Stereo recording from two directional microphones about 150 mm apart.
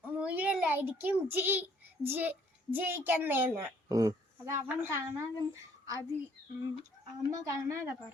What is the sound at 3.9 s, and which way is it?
A woman's voice, 25° right (ahead or behind).